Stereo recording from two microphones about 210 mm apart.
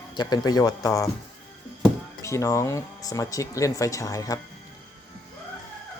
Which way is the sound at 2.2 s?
15° left (ahead or behind).